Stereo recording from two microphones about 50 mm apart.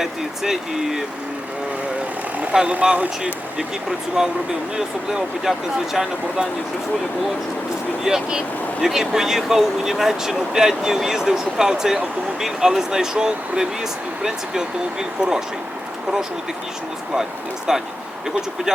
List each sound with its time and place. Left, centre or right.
0.0 s speech: centre
2.4 s speech: right
3.8 s speech: centre
8.0 s speech: centre
17.7 s speech: centre